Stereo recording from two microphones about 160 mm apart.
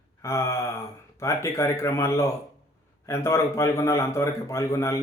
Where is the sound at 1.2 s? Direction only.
15° left (ahead or behind).